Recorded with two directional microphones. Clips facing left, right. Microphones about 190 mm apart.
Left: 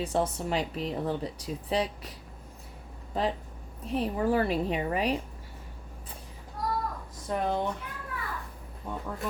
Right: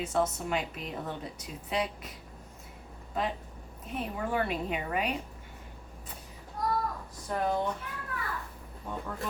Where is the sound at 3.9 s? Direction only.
35° left (ahead or behind).